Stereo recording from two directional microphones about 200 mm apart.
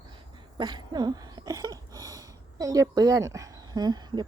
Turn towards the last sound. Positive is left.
turn(degrees=-20)  # may be behind; listen again after turning